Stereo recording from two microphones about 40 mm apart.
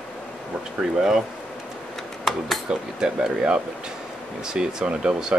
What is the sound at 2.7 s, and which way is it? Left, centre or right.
Speech, right.